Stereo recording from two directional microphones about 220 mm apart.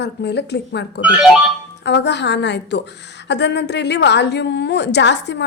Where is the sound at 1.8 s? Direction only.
50° left (ahead or behind).